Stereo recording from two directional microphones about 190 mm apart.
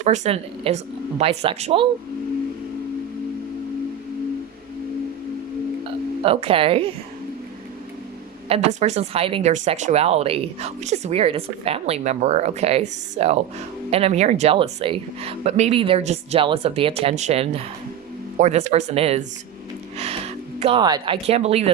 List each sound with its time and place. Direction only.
0.0 s speech: 35° right (ahead or behind)
6.2 s speech: 30° right (ahead or behind)
8.4 s speech: 30° right (ahead or behind)
20.6 s speech: 25° right (ahead or behind)